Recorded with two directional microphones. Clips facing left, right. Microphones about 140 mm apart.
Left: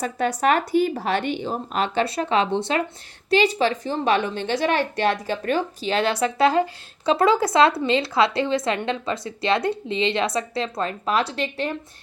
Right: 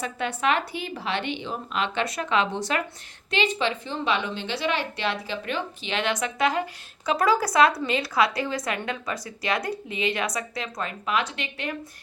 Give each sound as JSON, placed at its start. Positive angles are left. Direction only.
{"t": 0.0, "sound": "a woman's voice", "side_deg": 40}